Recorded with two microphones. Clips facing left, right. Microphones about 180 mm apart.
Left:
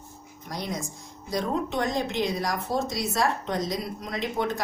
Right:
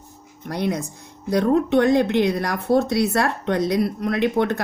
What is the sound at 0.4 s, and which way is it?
Speech, 60° right (ahead or behind).